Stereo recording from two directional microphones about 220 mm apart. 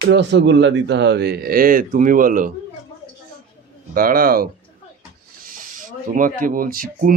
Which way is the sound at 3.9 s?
40° right (ahead or behind).